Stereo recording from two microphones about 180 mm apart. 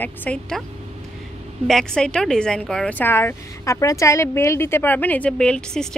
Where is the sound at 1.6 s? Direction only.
5° left (ahead or behind).